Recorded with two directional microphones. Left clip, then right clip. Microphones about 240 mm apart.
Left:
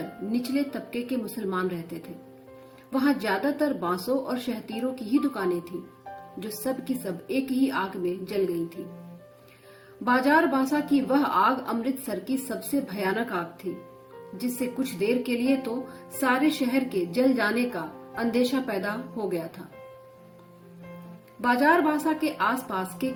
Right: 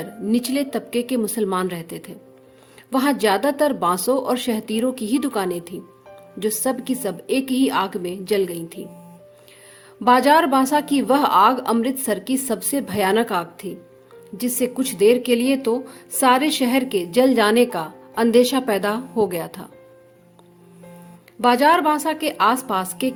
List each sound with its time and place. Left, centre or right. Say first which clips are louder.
0.3 s a woman's voice: right 7 dB; right
10.0 s a woman's voice: right 8 dB; right
21.4 s a woman's voice: right 6 dB; right